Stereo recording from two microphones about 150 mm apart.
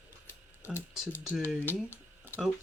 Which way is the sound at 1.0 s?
5° right (ahead or behind).